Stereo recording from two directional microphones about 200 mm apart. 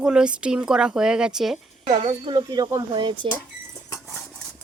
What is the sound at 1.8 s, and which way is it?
Speech, 30° right (ahead or behind).